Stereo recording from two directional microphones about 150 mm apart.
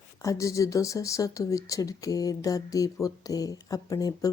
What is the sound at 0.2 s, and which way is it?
Speech, 20° left (ahead or behind).